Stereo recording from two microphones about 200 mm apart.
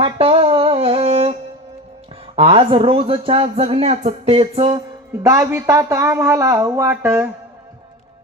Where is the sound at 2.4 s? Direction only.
30° right (ahead or behind); by 7.2 s 10° right (ahead or behind).